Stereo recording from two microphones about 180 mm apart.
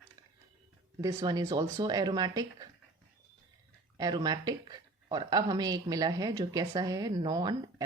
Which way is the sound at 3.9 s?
20° right (ahead or behind).